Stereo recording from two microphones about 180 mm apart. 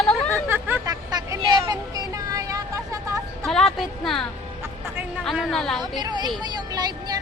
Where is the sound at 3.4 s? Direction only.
Centre (ahead or behind).